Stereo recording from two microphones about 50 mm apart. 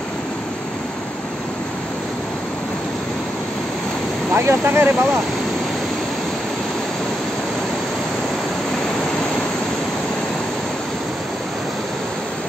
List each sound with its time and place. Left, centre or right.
4.4 s speech: right